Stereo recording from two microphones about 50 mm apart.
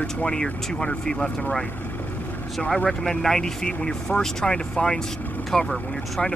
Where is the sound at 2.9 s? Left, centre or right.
Centre.